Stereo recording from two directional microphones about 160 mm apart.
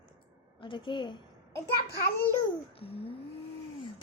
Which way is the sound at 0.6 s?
30° left (ahead or behind).